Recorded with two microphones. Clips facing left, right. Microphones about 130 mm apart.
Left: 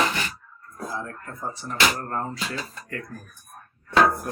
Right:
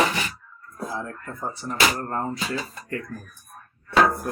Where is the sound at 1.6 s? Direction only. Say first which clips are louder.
Right 1 dB; 5° right (ahead or behind).